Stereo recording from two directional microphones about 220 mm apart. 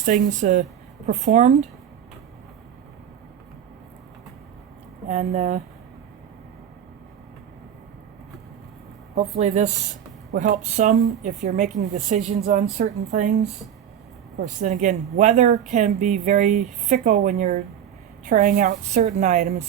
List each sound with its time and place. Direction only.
0.0 s speech: 35° right (ahead or behind)
5.0 s speech: 30° right (ahead or behind)
9.1 s speech: 30° right (ahead or behind)